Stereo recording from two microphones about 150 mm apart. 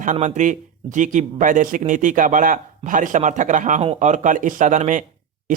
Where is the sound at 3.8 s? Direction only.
45° right (ahead or behind).